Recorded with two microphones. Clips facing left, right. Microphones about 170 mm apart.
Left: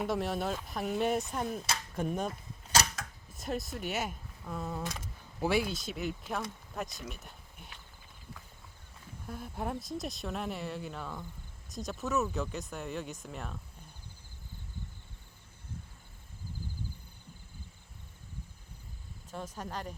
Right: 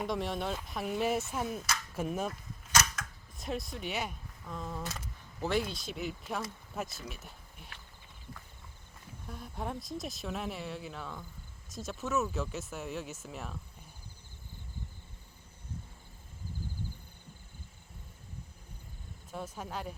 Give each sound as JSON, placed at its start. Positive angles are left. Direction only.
{"t": 0.0, "sound": "speech", "side_deg": 0}
{"t": 2.7, "sound": "a sound", "side_deg": 35}
{"t": 3.3, "sound": "speech", "side_deg": 0}
{"t": 9.2, "sound": "speech", "side_deg": 0}
{"t": 19.3, "sound": "speech", "side_deg": -10}